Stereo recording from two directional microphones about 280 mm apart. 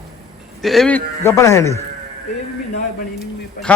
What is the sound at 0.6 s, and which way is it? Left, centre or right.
A man's voice, centre.